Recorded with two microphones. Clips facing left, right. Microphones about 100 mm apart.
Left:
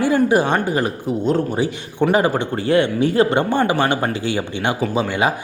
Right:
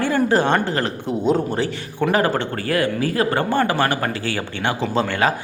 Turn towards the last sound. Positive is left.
turn(degrees=15)  # may be behind; listen again after turning